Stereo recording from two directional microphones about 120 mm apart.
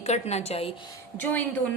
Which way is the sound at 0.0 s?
65° left (ahead or behind).